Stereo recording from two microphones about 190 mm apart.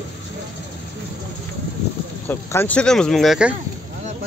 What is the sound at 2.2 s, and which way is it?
Speech, 10° left (ahead or behind).